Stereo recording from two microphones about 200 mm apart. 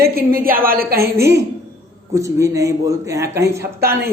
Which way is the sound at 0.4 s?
45° right (ahead or behind).